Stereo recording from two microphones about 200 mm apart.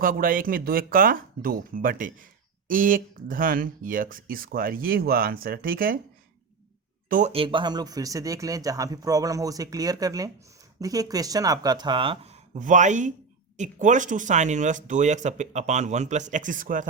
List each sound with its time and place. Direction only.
0.0 s speech: 45° right (ahead or behind)
7.1 s speech: 35° right (ahead or behind)